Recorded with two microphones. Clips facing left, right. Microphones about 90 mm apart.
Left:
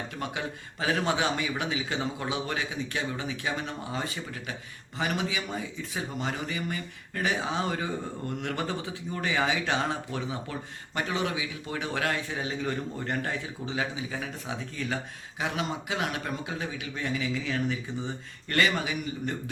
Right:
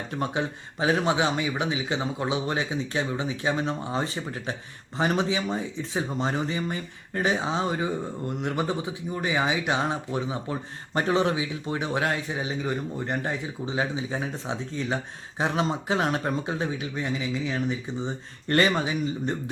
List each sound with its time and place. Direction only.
0.1 s speech: 30° right (ahead or behind)
10.9 s speech: 35° right (ahead or behind)
16.9 s speech: 20° right (ahead or behind)
18.4 s speech: 30° right (ahead or behind)